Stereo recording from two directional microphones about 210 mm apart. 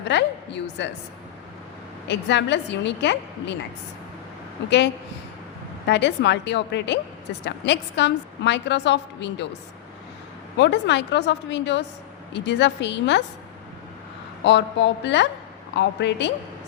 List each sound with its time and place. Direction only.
0.1 s a woman's voice: 55° left (ahead or behind)
2.0 s a woman's voice: 55° left (ahead or behind)
5.8 s a woman's voice: 55° left (ahead or behind)
10.6 s a woman's voice: 55° left (ahead or behind)
14.4 s a woman's voice: 55° left (ahead or behind)